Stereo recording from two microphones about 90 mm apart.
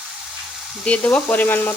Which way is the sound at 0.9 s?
15° left (ahead or behind).